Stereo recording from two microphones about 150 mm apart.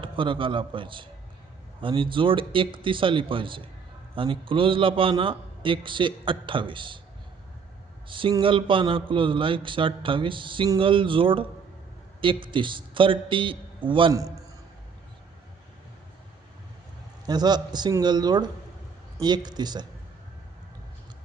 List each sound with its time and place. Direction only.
0.0 s a man's voice: 35° right (ahead or behind)
8.0 s a man's voice: 35° right (ahead or behind)
14.1 s a man's voice: 20° right (ahead or behind)
17.2 s a man's voice: 25° right (ahead or behind)